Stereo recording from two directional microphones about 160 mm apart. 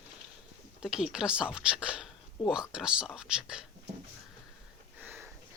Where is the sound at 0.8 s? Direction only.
5° right (ahead or behind).